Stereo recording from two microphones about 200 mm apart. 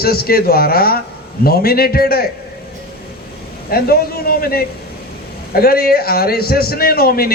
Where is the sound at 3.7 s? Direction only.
50° left (ahead or behind).